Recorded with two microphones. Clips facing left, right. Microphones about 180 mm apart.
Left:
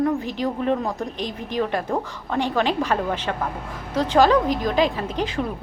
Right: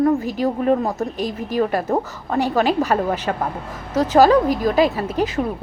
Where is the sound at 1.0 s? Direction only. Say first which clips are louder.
Right 5 dB; 10° right (ahead or behind).